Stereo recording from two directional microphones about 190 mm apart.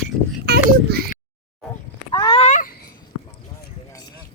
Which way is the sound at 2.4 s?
40° left (ahead or behind).